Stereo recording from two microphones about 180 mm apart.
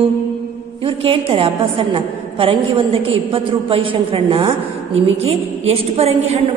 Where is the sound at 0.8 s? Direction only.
30° right (ahead or behind).